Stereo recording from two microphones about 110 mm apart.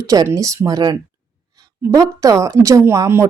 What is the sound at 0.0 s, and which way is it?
A woman's voice, 30° right (ahead or behind).